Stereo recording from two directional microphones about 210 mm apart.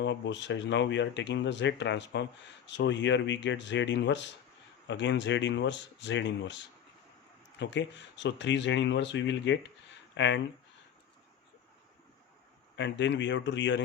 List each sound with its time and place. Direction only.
0.0 s speech: 60° left (ahead or behind)
12.7 s speech: 55° left (ahead or behind)